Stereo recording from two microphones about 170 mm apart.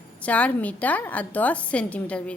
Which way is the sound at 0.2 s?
10° left (ahead or behind).